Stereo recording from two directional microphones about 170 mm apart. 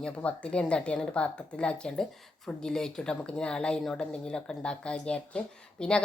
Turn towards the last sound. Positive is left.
turn(degrees=5)  # may be behind; listen again after turning